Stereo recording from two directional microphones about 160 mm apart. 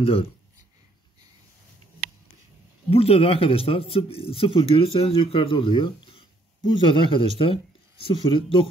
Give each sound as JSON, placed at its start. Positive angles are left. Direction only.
{"t": 0.0, "sound": "speech", "side_deg": 35}
{"t": 2.9, "sound": "speech", "side_deg": 40}